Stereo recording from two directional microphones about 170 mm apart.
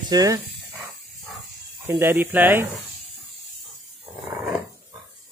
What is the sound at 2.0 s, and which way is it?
Speech, 15° right (ahead or behind).